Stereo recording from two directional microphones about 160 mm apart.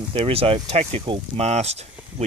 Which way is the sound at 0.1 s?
35° right (ahead or behind).